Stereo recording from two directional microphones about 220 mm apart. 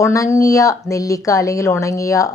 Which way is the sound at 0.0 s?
15° left (ahead or behind).